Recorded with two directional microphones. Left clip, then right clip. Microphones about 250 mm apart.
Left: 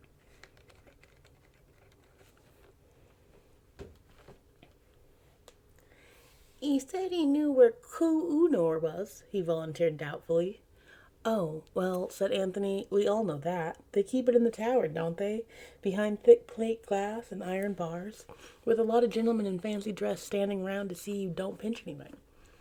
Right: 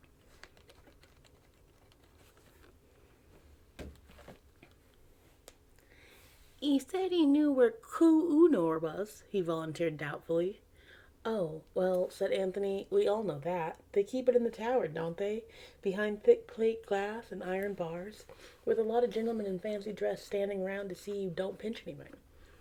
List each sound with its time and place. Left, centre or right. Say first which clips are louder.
6.6 s a woman's voice: even; centre
11.2 s speech: left 4 dB; left
13.9 s speech: left 2 dB; left
18.6 s speech: left 4 dB; left